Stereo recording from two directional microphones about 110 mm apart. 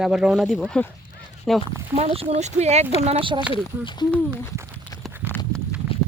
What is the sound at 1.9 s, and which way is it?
Speech, 65° right (ahead or behind).